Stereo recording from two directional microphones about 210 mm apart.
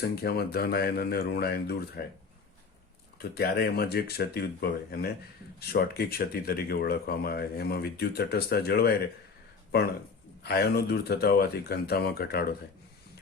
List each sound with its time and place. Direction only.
0.0 s speech: 50° left (ahead or behind)
3.2 s speech: 50° left (ahead or behind)
10.4 s speech: 50° left (ahead or behind)